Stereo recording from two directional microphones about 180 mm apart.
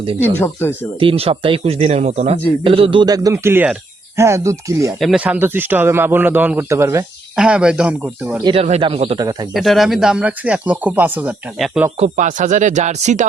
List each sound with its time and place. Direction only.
0.3 s speech: 10° left (ahead or behind)
0.9 s a man's voice: 30° right (ahead or behind)
4.9 s a man's voice: centre (ahead or behind)
8.4 s speech: 35° right (ahead or behind)
9.5 s speech: centre (ahead or behind)
11.9 s speech: 40° right (ahead or behind)